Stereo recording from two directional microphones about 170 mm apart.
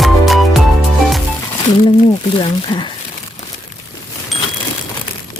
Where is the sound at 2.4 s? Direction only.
30° left (ahead or behind).